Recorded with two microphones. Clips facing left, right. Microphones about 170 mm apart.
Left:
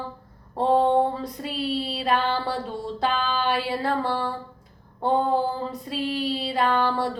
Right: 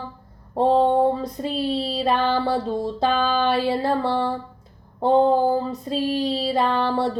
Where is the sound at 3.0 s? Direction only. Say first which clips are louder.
Right 4 dB; 25° right (ahead or behind).